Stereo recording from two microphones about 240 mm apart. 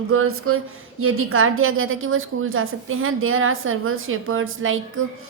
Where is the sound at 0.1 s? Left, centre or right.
Right.